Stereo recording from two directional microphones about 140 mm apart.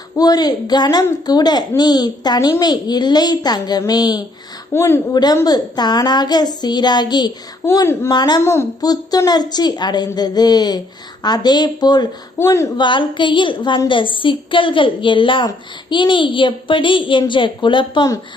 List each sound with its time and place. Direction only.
0.2 s a woman's voice: 30° left (ahead or behind)
4.7 s a woman's voice: 15° left (ahead or behind)
5.1 s a woman's voice: 30° left (ahead or behind)
7.6 s a woman's voice: 20° left (ahead or behind)
8.1 s a woman's voice: 30° left (ahead or behind)
8.4 s a woman's voice: 20° left (ahead or behind)